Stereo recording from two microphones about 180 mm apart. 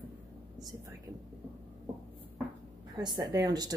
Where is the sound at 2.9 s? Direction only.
20° right (ahead or behind).